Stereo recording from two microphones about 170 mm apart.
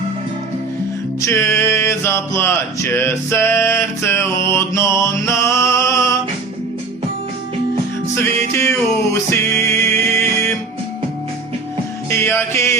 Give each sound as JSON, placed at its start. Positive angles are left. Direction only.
{"t": 1.2, "sound": "a sound", "side_deg": 15}
{"t": 8.1, "sound": "music", "side_deg": 15}
{"t": 12.0, "sound": "music", "side_deg": 15}